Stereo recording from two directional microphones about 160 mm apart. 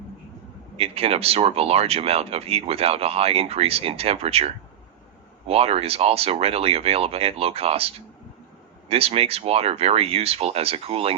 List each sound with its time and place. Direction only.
0.8 s speech: 40° right (ahead or behind)